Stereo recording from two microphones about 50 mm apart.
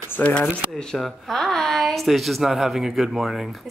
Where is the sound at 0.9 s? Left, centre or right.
Centre.